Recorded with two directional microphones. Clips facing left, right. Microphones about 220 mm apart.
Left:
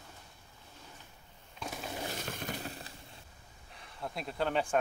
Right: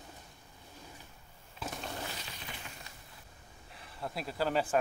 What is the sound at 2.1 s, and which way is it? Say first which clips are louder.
Smash: left 7 dB; 50° left (ahead or behind).